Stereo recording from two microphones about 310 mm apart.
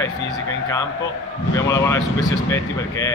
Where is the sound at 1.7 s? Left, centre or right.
Centre.